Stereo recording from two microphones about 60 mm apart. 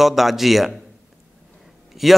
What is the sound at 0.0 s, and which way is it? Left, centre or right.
Speech, centre.